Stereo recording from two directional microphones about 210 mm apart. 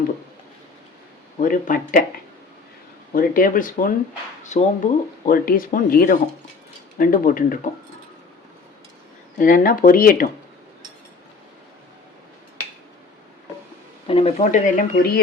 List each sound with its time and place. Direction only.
1.4 s speech: 40° left (ahead or behind)
3.2 s speech: 40° left (ahead or behind)
9.4 s speech: 40° left (ahead or behind)
14.1 s speech: 30° left (ahead or behind); by 15.2 s 45° left (ahead or behind)